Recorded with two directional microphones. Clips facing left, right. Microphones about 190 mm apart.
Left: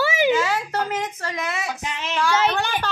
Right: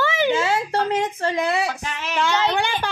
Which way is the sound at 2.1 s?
20° right (ahead or behind).